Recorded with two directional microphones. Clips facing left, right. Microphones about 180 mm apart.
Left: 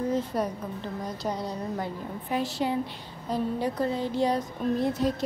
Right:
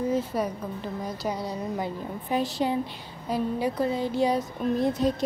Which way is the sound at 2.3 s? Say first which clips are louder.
Right 2 dB; 20° right (ahead or behind).